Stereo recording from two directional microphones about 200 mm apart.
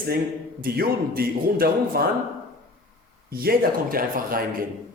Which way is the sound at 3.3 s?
50° right (ahead or behind).